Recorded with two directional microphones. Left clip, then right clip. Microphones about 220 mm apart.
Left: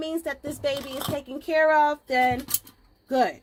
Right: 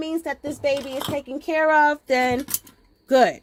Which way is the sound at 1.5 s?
35° right (ahead or behind).